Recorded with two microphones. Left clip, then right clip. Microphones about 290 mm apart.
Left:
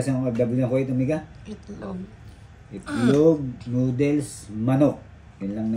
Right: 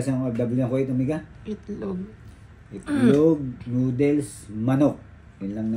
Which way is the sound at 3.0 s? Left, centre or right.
Centre.